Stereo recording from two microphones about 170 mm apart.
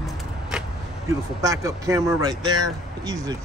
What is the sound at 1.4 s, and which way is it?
Speech, 20° right (ahead or behind).